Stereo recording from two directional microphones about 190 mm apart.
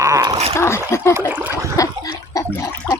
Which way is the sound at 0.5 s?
15° left (ahead or behind).